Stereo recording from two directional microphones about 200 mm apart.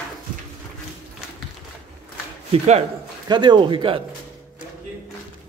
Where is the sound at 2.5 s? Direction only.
30° right (ahead or behind).